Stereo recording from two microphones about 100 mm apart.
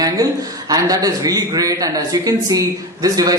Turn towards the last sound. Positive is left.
turn(degrees=-40)  # may be behind; listen again after turning